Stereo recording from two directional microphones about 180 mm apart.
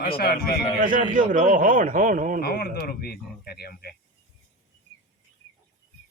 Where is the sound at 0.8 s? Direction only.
50° right (ahead or behind).